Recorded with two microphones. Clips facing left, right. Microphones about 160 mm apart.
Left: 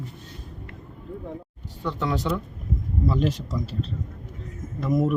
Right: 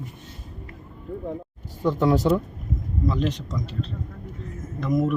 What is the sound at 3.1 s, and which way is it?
Speech, 5° left (ahead or behind).